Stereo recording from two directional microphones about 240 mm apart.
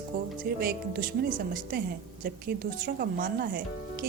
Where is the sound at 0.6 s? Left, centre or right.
Right.